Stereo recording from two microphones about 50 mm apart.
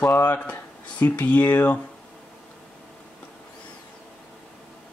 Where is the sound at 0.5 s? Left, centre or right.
Left.